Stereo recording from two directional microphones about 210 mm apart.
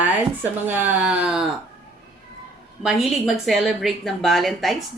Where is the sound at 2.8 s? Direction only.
Centre (ahead or behind).